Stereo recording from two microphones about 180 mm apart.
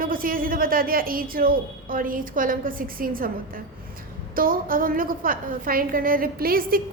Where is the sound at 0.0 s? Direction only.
50° right (ahead or behind).